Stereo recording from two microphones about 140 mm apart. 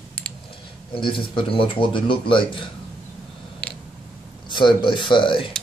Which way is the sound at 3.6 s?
10° left (ahead or behind).